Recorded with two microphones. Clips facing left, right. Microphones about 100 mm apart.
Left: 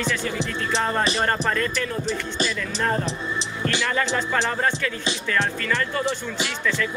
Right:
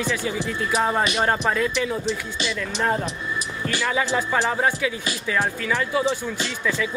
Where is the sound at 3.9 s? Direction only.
10° right (ahead or behind).